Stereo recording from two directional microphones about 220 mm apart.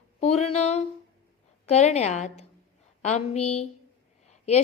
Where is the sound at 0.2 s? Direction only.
30° left (ahead or behind).